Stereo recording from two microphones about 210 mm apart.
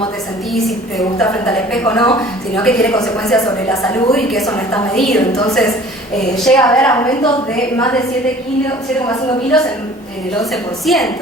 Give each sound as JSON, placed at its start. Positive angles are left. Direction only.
{"t": 0.5, "sound": "a woman's voice", "side_deg": 0}
{"t": 1.2, "sound": "a woman's voice", "side_deg": 15}
{"t": 2.6, "sound": "a woman's voice", "side_deg": 5}
{"t": 3.4, "sound": "a woman's voice", "side_deg": 15}
{"t": 4.1, "sound": "a woman's voice", "side_deg": 0}
{"t": 5.3, "sound": "a woman's voice", "side_deg": 15}
{"t": 6.3, "sound": "a woman's voice", "side_deg": 5}
{"t": 6.8, "sound": "a woman's voice", "side_deg": 15}
{"t": 9.0, "sound": "a woman's voice", "side_deg": 15}
{"t": 10.5, "sound": "a woman's voice", "side_deg": 0}